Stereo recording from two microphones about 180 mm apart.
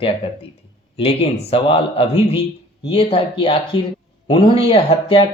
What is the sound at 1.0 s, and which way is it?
A man's voice, 30° left (ahead or behind).